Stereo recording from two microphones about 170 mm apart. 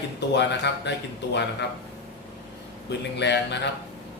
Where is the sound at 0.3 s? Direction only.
90° left.